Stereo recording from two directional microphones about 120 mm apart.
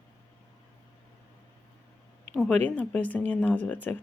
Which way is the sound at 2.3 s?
65° right (ahead or behind).